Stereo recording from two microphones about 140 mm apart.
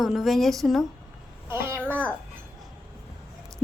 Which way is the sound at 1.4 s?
15° right (ahead or behind).